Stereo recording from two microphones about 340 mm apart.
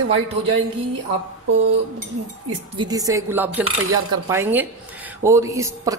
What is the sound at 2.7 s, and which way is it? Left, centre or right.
A man's voice, centre.